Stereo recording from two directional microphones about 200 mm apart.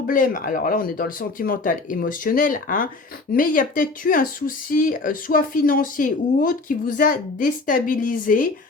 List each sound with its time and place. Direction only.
0.1 s speech: 40° left (ahead or behind)